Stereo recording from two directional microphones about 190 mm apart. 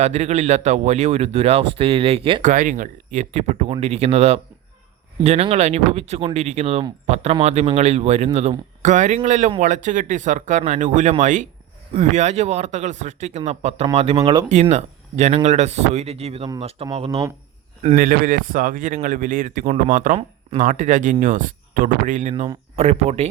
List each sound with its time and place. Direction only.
0.0 s speech: 35° right (ahead or behind)
2.4 s speech: 45° right (ahead or behind); by 14.4 s 20° right (ahead or behind)
14.5 s speech: 35° right (ahead or behind)
17.9 s a man's voice: 45° right (ahead or behind)